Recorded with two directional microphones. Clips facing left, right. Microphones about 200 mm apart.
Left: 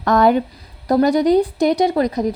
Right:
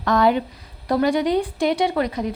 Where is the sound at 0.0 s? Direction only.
45° left (ahead or behind).